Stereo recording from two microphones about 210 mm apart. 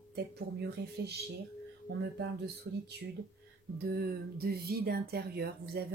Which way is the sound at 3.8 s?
50° right (ahead or behind).